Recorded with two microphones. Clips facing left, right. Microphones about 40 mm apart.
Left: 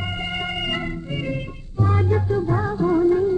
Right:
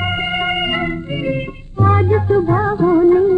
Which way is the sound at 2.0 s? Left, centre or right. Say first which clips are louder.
Right 6 dB; right.